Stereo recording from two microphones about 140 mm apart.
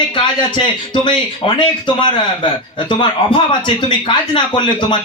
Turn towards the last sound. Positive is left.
turn(degrees=35)  # may be behind; listen again after turning